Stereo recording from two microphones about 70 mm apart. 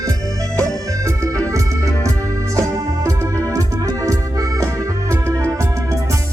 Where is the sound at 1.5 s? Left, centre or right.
Right.